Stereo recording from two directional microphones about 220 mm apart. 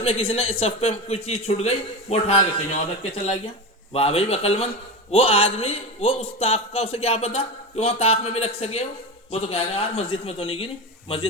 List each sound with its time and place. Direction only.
0.0 s a man's voice: 25° left (ahead or behind)
3.9 s a man's voice: 25° left (ahead or behind)